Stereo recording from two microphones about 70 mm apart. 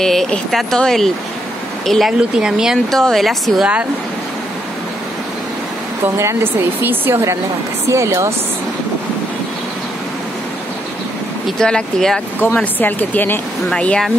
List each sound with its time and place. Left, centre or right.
0.0 s speech: centre
2.3 s speech: centre
2.9 s speech: centre
6.1 s speech: right
11.4 s speech: centre
12.7 s speech: left
13.7 s speech: centre